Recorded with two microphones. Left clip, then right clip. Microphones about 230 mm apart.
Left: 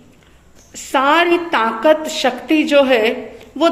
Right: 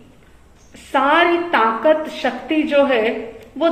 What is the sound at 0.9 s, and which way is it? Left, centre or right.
A woman's voice, left.